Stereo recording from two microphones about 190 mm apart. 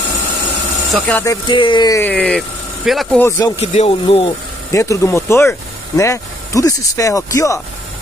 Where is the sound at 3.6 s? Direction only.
30° left (ahead or behind).